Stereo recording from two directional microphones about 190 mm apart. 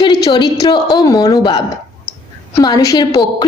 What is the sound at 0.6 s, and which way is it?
Speech, 20° left (ahead or behind).